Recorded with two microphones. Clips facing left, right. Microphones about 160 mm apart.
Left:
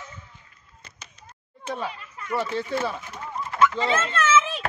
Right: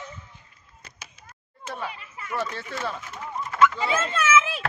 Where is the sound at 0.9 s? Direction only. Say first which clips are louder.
Even; 10° right (ahead or behind).